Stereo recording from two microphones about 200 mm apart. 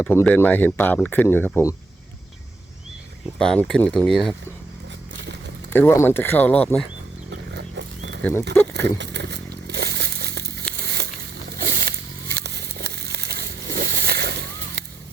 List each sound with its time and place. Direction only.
0.0 s speech: 10° left (ahead or behind)
3.3 s speech: 5° left (ahead or behind)
5.7 s speech: 10° left (ahead or behind)
7.3 s wild animals: 60° right (ahead or behind)
8.2 s speech: 10° left (ahead or behind)
9.0 s crumpling: 60° right (ahead or behind)
11.5 s a sound: 45° right (ahead or behind)